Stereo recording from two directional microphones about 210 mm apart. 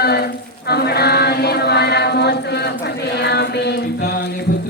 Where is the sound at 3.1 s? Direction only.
50° left (ahead or behind).